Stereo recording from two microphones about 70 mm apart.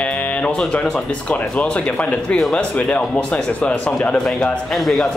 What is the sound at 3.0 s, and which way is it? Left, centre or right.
Speech, centre.